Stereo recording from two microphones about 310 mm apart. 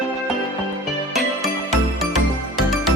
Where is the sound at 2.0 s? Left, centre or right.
Centre.